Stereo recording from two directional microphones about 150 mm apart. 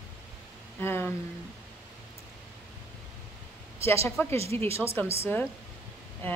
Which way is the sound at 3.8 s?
20° left (ahead or behind).